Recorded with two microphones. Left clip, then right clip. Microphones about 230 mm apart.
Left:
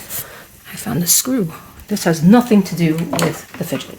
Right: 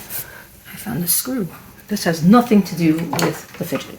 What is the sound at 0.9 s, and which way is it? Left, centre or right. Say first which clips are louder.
Speech: left 7 dB; left.